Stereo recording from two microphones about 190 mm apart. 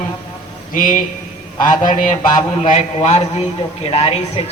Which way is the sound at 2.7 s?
35° left (ahead or behind).